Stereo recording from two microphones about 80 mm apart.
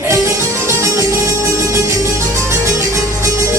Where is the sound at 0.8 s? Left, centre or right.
Right.